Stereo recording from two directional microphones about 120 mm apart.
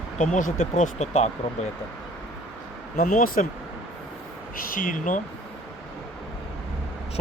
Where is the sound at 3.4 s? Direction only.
90° left.